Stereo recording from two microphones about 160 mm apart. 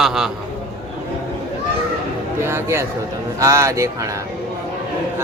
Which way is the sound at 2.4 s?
15° right (ahead or behind).